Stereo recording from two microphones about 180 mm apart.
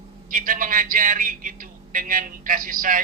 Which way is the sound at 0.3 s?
50° right (ahead or behind).